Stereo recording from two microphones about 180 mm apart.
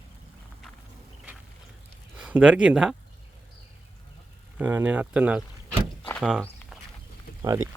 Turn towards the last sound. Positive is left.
turn(degrees=-15)  # may be behind; listen again after turning